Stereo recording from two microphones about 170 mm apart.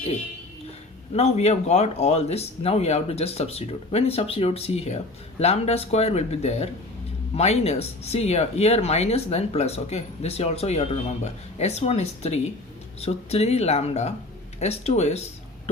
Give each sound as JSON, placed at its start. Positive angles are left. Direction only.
{"t": 1.1, "sound": "speech", "side_deg": 40}